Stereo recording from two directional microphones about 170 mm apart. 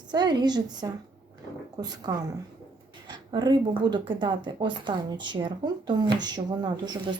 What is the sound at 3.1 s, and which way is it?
Speech, 25° right (ahead or behind).